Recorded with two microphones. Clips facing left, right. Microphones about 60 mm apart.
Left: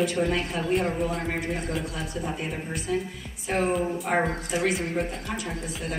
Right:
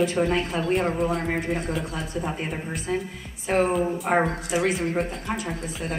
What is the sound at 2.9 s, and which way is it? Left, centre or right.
Speech, right.